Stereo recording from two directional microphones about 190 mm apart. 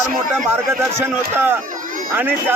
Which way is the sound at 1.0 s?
10° right (ahead or behind).